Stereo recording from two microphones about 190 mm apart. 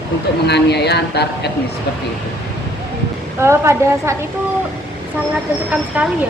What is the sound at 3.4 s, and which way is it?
Speech, 15° right (ahead or behind).